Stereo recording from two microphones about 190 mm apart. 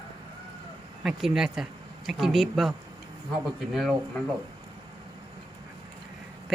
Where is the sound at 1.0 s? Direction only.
Centre (ahead or behind).